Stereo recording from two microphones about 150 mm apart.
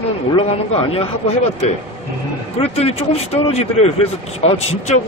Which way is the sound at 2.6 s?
40° left (ahead or behind).